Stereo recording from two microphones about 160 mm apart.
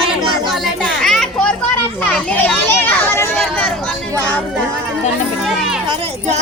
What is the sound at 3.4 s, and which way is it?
Chatter, centre (ahead or behind).